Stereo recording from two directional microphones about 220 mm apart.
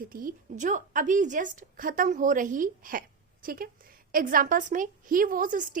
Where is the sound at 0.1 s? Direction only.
40° right (ahead or behind).